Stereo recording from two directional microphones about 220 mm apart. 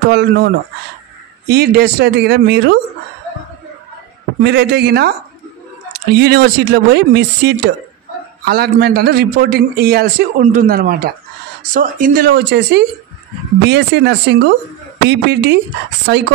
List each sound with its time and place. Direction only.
0.1 s a man's voice: 50° right (ahead or behind)
1.5 s a man's voice: 45° right (ahead or behind)
4.4 s a man's voice: 50° right (ahead or behind)
6.1 s a man's voice: 45° right (ahead or behind)